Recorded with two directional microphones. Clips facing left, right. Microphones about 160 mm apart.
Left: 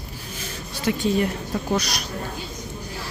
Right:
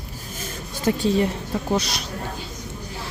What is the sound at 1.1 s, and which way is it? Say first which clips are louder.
Speech: right 1 dB; 30° right (ahead or behind).